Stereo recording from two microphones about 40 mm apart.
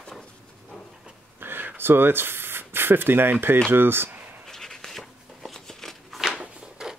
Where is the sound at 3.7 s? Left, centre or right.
Right.